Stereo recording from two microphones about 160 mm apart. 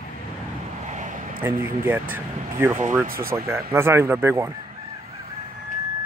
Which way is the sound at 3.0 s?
65° right (ahead or behind).